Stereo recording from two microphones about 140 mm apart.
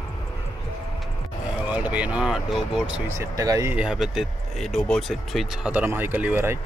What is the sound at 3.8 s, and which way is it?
Speech, 5° right (ahead or behind).